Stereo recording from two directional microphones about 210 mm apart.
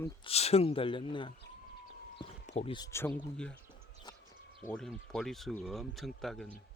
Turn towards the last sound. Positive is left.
turn(degrees=0)  # may be behind; listen again after turning